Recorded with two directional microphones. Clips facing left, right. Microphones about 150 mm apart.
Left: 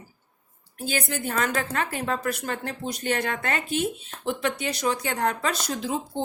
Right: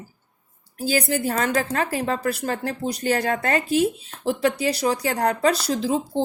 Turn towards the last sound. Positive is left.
turn(degrees=-35)  # may be behind; listen again after turning